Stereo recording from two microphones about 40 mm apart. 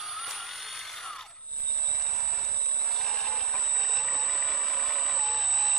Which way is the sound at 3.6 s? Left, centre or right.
Centre.